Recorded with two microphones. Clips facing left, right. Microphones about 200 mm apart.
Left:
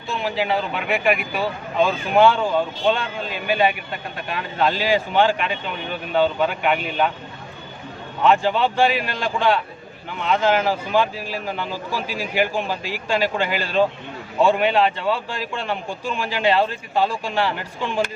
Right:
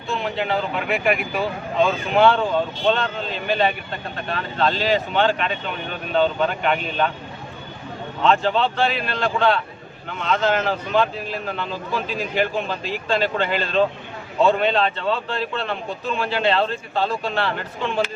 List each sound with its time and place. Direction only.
0.1 s a man's voice: centre (ahead or behind)
8.2 s a man's voice: 10° left (ahead or behind)